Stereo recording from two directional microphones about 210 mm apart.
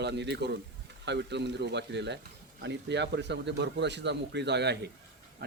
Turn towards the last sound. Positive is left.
turn(degrees=-55)  # may be behind; listen again after turning